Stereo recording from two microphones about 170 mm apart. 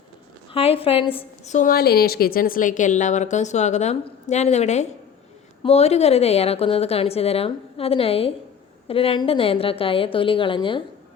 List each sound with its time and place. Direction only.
0.5 s a woman's voice: 35° left (ahead or behind)
1.5 s a woman's voice: 60° left (ahead or behind); by 10.8 s 30° left (ahead or behind)